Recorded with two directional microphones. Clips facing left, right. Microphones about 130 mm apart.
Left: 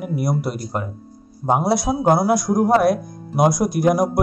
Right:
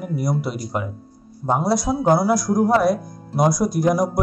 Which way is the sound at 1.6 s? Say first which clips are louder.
Right 1 dB; 65° left (ahead or behind).